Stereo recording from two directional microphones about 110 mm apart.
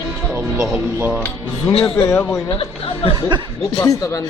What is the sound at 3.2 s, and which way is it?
Speech, 40° right (ahead or behind).